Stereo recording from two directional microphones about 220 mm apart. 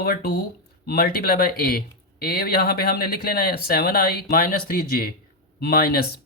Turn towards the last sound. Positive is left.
turn(degrees=45)  # may be behind; listen again after turning